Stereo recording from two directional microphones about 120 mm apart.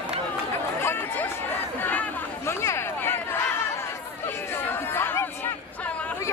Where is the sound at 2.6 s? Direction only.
20° left (ahead or behind).